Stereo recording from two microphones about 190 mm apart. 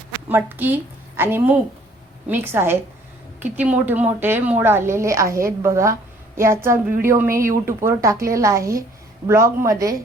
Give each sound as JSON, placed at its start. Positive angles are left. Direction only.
{"t": 0.3, "sound": "a woman's voice", "side_deg": -10}